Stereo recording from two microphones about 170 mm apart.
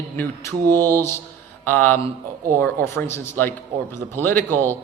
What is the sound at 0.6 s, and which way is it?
Mantra, 20° right (ahead or behind).